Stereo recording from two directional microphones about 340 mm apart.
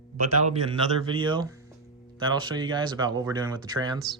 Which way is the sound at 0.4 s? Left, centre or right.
Centre.